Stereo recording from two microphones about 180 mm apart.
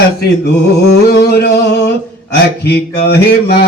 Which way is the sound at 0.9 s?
70° left (ahead or behind).